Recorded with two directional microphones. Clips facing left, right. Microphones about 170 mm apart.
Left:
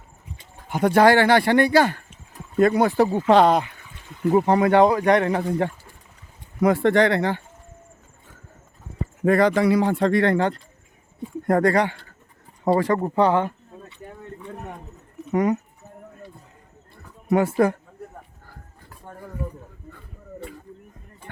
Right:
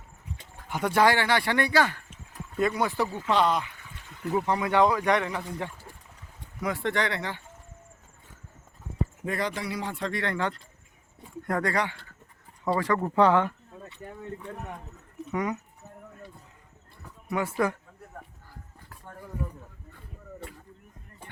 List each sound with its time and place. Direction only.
0.7 s speech: 50° left (ahead or behind)
3.2 s speech: 85° left
4.1 s speech: 20° left (ahead or behind)
4.4 s speech: 60° left (ahead or behind)
6.6 s speech: 65° left (ahead or behind)
9.2 s speech: 75° left (ahead or behind)
10.0 s speech: 50° left (ahead or behind)
12.7 s speech: 35° left (ahead or behind)
15.3 s speech: 45° left (ahead or behind)
17.2 s speech: 55° left (ahead or behind)